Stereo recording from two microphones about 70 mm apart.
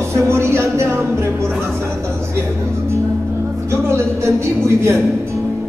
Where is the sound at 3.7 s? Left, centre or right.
Right.